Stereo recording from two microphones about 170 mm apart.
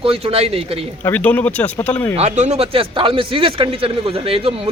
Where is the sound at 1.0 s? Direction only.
10° left (ahead or behind).